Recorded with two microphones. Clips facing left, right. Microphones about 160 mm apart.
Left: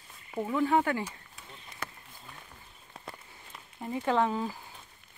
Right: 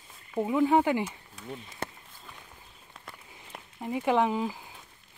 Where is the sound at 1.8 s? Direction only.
25° right (ahead or behind).